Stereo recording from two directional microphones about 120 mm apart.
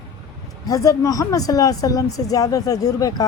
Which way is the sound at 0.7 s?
30° left (ahead or behind).